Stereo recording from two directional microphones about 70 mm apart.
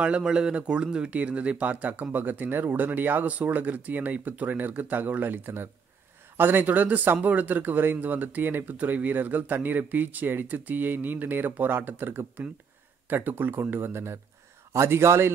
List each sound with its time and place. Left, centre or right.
0.0 s a man's voice: centre; by 15.3 s right